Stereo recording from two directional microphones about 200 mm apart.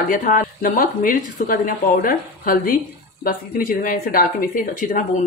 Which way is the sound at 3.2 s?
45° left (ahead or behind).